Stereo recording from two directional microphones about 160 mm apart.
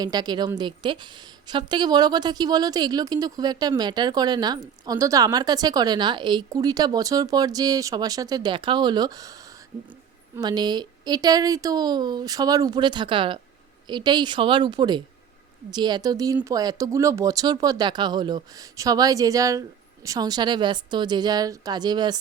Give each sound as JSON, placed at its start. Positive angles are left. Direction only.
{"t": 0.0, "sound": "a woman's voice", "side_deg": -25}
{"t": 10.3, "sound": "a woman's voice", "side_deg": -25}